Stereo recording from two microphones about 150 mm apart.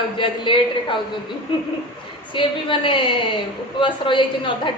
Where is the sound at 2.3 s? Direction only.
35° left (ahead or behind).